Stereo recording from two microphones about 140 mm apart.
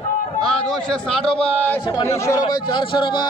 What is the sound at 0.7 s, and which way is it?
A man's voice, 5° left (ahead or behind).